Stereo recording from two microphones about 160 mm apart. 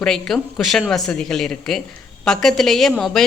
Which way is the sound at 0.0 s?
5° left (ahead or behind).